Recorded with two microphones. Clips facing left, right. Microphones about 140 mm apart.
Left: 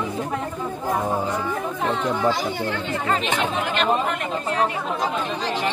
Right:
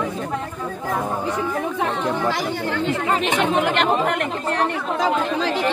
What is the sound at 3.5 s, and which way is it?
Speech, 70° right (ahead or behind).